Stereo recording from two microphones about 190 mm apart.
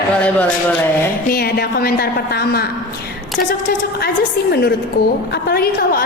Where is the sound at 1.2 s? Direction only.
55° left (ahead or behind).